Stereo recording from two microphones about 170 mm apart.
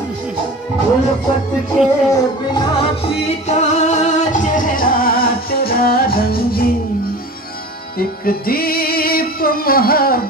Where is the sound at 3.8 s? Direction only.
45° left (ahead or behind); by 6.7 s 60° left (ahead or behind).